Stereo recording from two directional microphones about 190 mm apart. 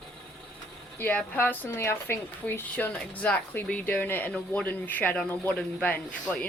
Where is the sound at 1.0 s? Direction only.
10° left (ahead or behind).